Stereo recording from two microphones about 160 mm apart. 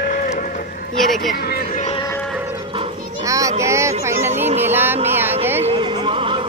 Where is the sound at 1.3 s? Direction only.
65° left (ahead or behind).